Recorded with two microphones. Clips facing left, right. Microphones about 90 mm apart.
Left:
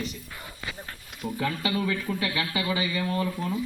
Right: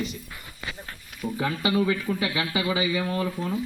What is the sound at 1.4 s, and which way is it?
Speech, 15° right (ahead or behind).